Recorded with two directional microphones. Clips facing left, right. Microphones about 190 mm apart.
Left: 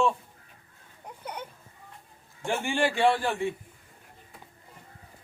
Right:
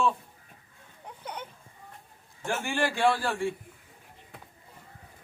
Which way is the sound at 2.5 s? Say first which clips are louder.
Left 2 dB; 15° left (ahead or behind).